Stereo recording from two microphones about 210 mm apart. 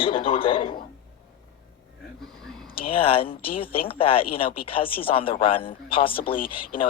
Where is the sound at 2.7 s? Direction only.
25° left (ahead or behind).